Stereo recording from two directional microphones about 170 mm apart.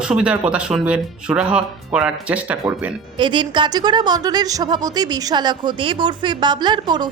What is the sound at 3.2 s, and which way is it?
Speech, 25° right (ahead or behind).